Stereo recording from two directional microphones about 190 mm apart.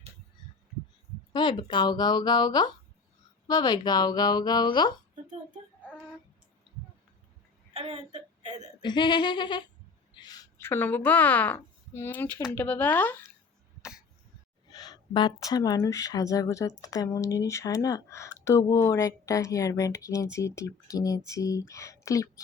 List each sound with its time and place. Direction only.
1.3 s speech: 25° left (ahead or behind)
7.7 s a sound: 35° right (ahead or behind)
8.8 s a woman's voice: 25° left (ahead or behind)
14.7 s speech: 20° left (ahead or behind)